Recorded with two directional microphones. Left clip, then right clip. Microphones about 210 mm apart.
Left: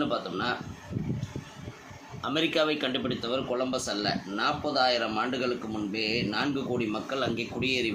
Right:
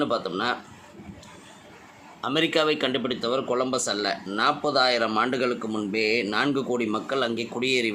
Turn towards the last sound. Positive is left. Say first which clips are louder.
# right 4 dB
turn(degrees=-35)  # may be behind; listen again after turning